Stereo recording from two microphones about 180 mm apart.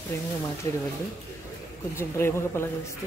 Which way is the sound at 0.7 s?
15° left (ahead or behind).